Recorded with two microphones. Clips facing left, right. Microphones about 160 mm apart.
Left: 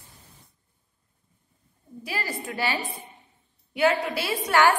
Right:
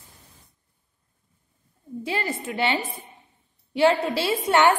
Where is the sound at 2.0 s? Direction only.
25° right (ahead or behind).